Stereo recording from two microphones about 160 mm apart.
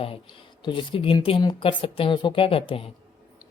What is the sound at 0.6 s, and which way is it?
Speech, 30° left (ahead or behind).